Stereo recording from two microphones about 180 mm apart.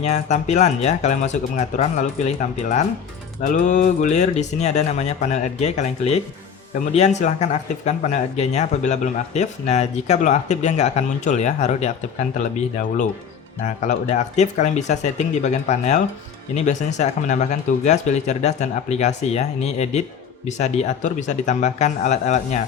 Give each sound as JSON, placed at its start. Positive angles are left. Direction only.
{"t": 0.0, "sound": "speech", "side_deg": 40}
{"t": 13.8, "sound": "speech", "side_deg": 40}